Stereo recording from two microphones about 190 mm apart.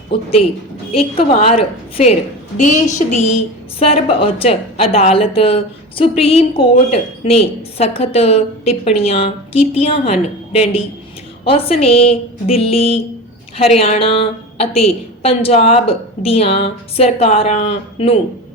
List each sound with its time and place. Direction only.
0.1 s a woman's voice: 30° left (ahead or behind)